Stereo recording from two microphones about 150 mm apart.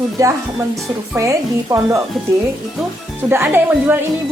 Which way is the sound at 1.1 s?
20° right (ahead or behind).